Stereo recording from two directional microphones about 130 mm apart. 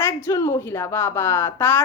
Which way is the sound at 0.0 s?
20° left (ahead or behind).